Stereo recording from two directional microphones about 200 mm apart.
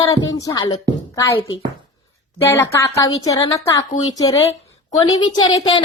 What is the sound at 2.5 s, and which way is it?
A woman's voice, 15° left (ahead or behind).